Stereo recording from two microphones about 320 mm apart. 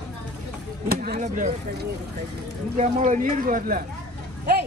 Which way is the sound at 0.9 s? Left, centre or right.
Right.